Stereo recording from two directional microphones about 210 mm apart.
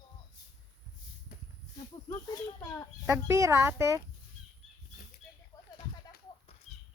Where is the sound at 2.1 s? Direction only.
15° left (ahead or behind).